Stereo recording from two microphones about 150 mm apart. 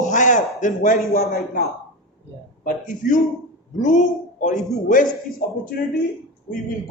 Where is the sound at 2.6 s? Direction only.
60° left (ahead or behind).